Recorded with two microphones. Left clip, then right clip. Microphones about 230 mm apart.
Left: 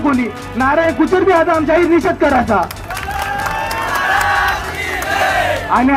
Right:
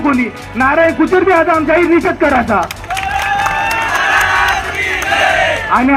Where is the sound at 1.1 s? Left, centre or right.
Right.